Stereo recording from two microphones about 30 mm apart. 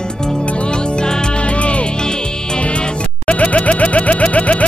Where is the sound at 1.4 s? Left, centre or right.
Left.